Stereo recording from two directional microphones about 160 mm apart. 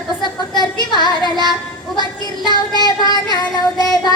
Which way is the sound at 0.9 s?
25° left (ahead or behind).